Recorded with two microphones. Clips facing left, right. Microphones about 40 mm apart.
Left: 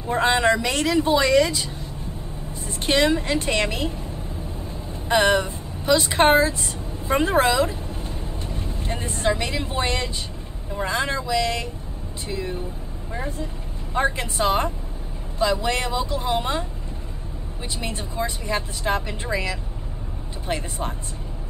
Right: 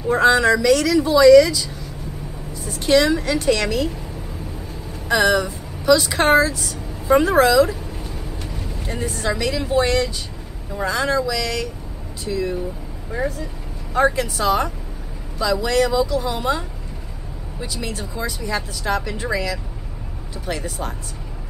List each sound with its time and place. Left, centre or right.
0.1 s speech: left
5.0 s speech: left
13.9 s speech: left